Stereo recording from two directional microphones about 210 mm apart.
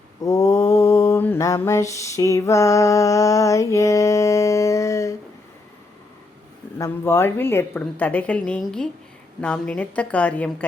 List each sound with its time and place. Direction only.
0.2 s mantra: 15° left (ahead or behind)
6.7 s a woman's voice: 15° left (ahead or behind)